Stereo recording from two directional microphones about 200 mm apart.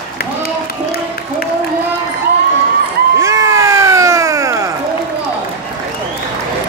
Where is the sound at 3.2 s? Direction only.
15° right (ahead or behind).